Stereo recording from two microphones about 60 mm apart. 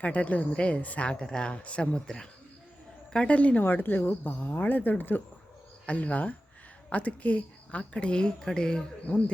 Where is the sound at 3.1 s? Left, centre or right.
Left.